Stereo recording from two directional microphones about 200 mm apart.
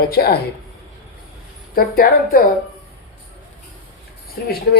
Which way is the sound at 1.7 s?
45° left (ahead or behind).